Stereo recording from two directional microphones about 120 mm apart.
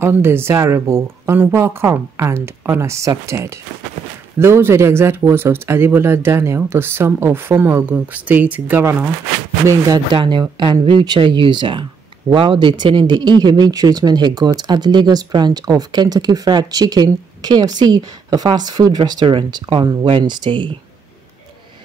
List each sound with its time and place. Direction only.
0.0 s speech: 20° right (ahead or behind)
9.7 s speech: 25° right (ahead or behind)
10.1 s speech: 45° right (ahead or behind)